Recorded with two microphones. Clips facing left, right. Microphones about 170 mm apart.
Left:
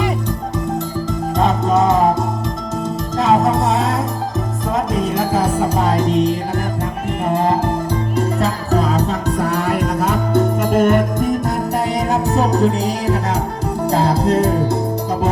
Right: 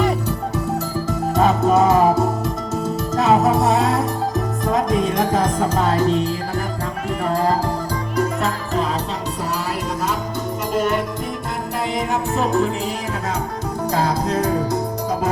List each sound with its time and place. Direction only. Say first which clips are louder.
1.4 s music: even; centre (ahead or behind); by 11.3 s 50° left (ahead or behind)
11.9 s music: left 3 dB; 35° left (ahead or behind)